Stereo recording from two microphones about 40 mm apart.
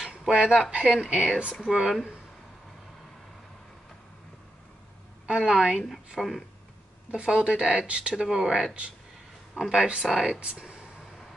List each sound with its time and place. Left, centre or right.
0.3 s speech: right
1.7 s speech: centre
5.2 s speech: centre
6.1 s speech: centre
7.1 s speech: right
8.2 s speech: centre